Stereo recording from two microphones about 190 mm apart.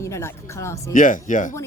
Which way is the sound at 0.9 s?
45° left (ahead or behind).